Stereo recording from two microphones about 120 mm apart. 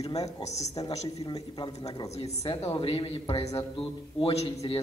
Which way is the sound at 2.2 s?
55° left (ahead or behind).